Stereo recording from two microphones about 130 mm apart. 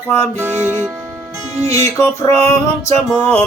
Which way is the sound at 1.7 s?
25° left (ahead or behind).